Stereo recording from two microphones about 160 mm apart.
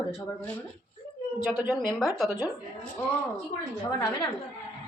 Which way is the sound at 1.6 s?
Centre (ahead or behind).